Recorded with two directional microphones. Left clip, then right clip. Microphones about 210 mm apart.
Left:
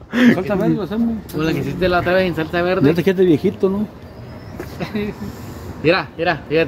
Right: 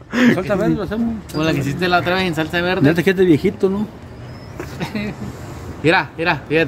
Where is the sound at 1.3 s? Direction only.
50° right (ahead or behind).